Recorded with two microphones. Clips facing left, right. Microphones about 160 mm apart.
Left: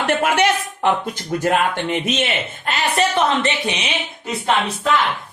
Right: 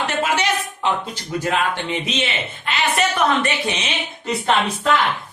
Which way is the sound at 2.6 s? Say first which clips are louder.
Left 1 dB; 30° left (ahead or behind).